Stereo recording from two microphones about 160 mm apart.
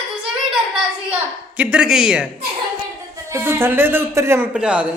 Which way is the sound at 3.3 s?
15° right (ahead or behind).